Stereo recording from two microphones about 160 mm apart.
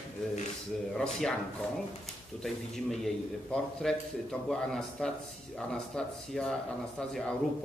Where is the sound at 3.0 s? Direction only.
5° left (ahead or behind).